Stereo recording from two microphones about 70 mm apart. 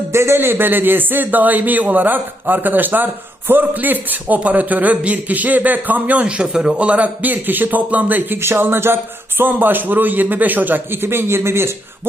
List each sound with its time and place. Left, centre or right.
0.1 s a man's voice: right
8.4 s a man's voice: right